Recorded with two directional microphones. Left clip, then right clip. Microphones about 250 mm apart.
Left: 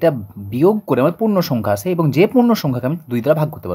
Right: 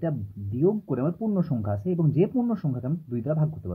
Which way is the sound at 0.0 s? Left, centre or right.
Left.